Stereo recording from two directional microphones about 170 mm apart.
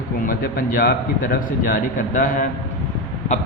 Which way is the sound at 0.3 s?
60° left (ahead or behind).